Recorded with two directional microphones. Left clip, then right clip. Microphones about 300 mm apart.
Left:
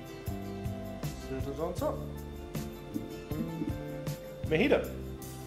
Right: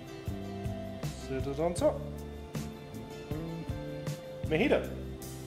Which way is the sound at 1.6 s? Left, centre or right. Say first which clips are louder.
Right 4 dB; right.